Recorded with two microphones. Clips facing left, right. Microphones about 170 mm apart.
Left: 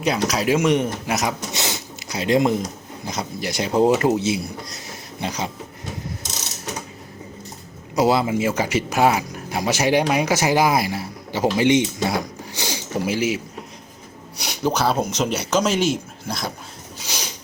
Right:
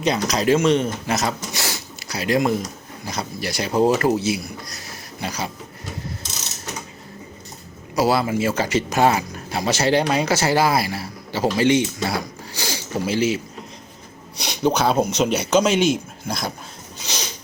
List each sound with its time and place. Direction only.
0.0 s speech: 5° left (ahead or behind)
7.9 s speech: 20° left (ahead or behind); by 16.4 s centre (ahead or behind)